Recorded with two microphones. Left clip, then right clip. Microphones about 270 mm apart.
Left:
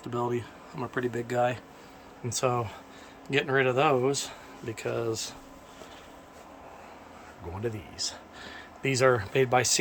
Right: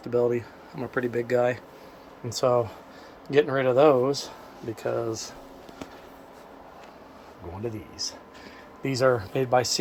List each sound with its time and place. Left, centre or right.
0.0 s speech: centre
4.7 s speech: centre
8.0 s speech: centre